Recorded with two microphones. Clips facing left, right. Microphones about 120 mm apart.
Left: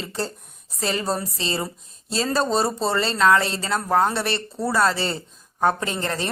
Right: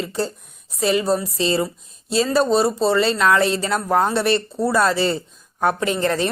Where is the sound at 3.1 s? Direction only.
25° left (ahead or behind).